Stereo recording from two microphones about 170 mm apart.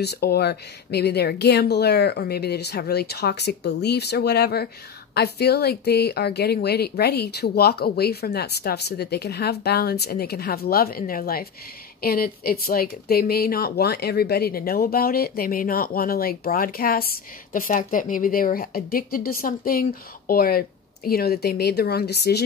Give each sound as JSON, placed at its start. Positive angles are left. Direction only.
{"t": 0.0, "sound": "speech", "side_deg": 70}